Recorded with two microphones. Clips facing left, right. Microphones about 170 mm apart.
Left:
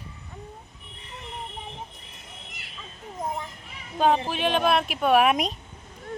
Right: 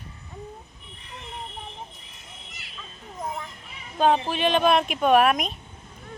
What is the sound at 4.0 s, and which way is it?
Speech, 5° left (ahead or behind).